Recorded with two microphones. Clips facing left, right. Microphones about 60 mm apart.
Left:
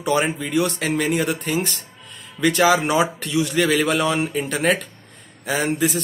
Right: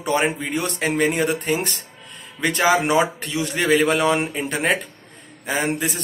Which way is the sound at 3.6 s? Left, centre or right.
Right.